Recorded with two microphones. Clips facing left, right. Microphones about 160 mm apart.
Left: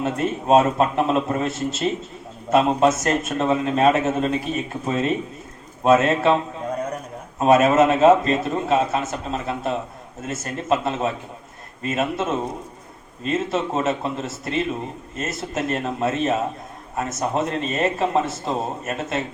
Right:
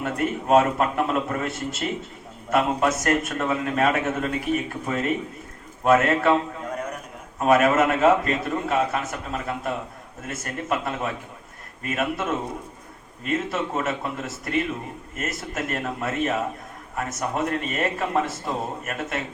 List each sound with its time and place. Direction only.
0.0 s a man's voice: 20° left (ahead or behind)